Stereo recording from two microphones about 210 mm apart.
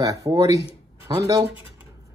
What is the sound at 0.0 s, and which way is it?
Speech, 15° right (ahead or behind).